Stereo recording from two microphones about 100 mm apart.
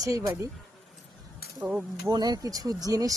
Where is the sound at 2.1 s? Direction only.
40° right (ahead or behind).